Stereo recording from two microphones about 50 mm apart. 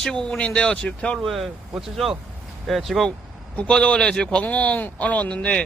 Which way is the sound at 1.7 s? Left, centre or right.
Centre.